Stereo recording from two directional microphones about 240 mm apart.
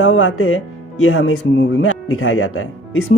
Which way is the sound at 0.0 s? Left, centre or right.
Left.